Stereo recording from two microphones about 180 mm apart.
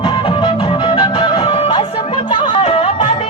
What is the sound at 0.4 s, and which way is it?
Music, 25° left (ahead or behind).